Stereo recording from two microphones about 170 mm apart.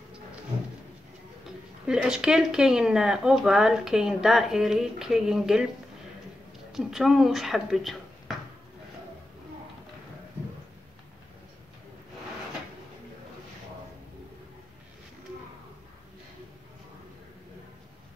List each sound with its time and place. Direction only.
1.9 s speech: 5° right (ahead or behind)
6.7 s speech: centre (ahead or behind)